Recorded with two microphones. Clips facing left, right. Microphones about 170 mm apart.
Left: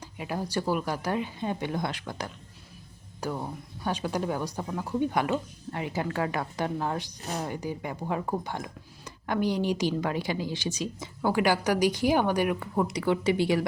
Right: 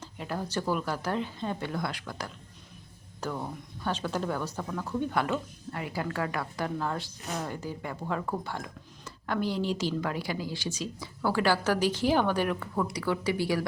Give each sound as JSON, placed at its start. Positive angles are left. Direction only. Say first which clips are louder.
{"t": 0.0, "sound": "speech", "louder": "left 2 dB", "side_deg": 10}